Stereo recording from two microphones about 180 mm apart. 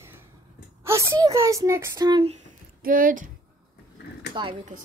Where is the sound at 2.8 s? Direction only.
50° right (ahead or behind).